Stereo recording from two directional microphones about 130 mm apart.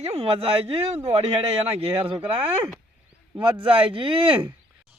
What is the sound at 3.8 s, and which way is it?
Speech, 40° right (ahead or behind).